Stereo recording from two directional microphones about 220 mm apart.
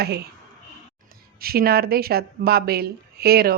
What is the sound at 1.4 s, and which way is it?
Speech, 45° right (ahead or behind).